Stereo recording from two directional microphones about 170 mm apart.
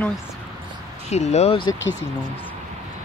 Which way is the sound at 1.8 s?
90° left.